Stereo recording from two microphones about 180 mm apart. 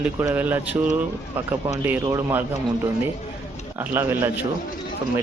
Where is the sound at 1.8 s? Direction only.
10° right (ahead or behind).